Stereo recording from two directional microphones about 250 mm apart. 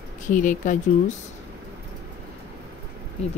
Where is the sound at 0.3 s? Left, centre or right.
Left.